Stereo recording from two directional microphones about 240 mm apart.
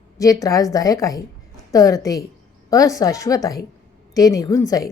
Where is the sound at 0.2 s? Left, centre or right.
Centre.